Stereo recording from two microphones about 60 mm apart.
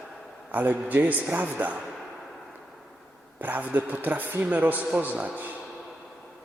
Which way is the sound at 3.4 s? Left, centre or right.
Right.